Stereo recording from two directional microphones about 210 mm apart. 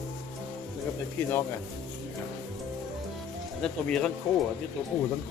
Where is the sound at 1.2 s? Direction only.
10° left (ahead or behind).